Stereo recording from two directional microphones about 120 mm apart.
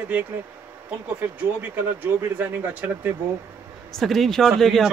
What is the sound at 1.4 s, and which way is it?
Speech, 15° right (ahead or behind).